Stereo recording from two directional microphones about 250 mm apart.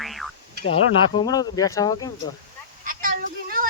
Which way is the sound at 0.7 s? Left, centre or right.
Centre.